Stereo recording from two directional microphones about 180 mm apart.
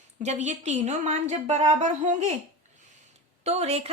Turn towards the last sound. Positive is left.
turn(degrees=-35)  # may be behind; listen again after turning